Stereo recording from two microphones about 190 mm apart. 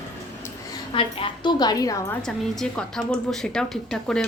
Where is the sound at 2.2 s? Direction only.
Centre (ahead or behind).